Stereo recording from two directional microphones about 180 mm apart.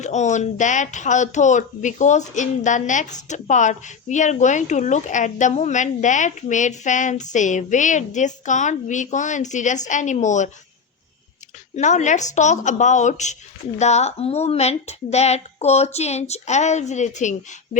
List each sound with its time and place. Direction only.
0.0 s speech: 40° left (ahead or behind)
11.7 s a woman's voice: 40° left (ahead or behind)